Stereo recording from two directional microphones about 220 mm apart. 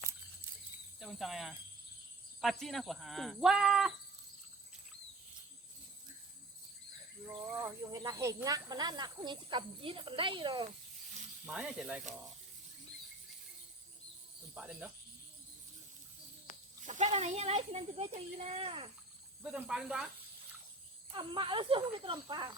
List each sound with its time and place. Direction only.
0.9 s speech: centre (ahead or behind)
7.6 s speech: 15° right (ahead or behind)
11.4 s speech: 5° right (ahead or behind)
14.5 s speech: 5° right (ahead or behind)
16.8 s speech: 35° right (ahead or behind)
19.4 s speech: 5° right (ahead or behind)
21.1 s speech: 20° right (ahead or behind)